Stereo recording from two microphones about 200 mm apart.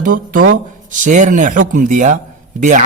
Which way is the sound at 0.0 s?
45° right (ahead or behind).